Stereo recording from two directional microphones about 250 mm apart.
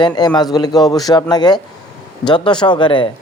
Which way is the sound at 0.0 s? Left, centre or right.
Centre.